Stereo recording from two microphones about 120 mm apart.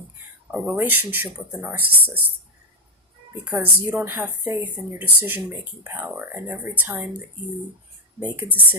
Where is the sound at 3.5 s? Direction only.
15° right (ahead or behind).